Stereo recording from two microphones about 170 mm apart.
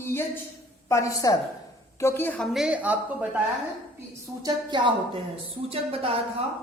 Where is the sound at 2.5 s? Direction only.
5° right (ahead or behind).